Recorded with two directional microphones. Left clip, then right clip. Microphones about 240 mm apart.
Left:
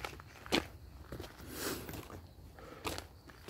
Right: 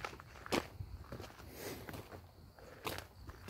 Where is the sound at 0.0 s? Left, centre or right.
Centre.